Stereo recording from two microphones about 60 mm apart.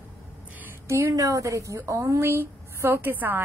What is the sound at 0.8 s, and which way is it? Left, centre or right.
A woman's voice, right.